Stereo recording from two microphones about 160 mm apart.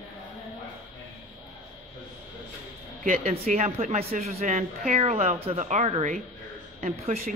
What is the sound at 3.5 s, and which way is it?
A woman's voice, 45° right (ahead or behind).